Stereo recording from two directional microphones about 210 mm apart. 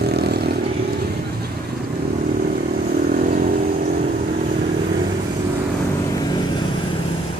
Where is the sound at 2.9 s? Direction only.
45° right (ahead or behind).